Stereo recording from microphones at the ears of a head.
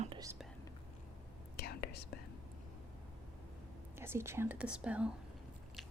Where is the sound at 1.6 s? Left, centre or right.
Left.